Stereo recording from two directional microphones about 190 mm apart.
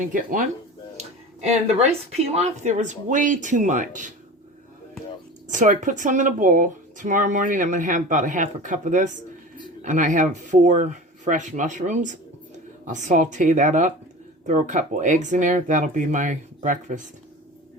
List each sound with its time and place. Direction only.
0.0 s speech: 45° right (ahead or behind)
1.6 s speech: 35° right (ahead or behind)
5.5 s speech: 40° right (ahead or behind)